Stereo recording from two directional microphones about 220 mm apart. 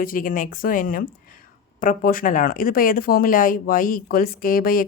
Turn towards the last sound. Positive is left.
turn(degrees=40)  # may be behind; listen again after turning